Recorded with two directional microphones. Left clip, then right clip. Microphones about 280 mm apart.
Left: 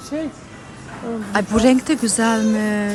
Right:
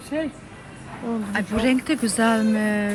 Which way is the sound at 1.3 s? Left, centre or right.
Centre.